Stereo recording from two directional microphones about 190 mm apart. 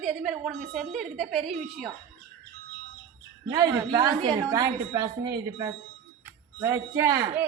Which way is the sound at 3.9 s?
25° right (ahead or behind).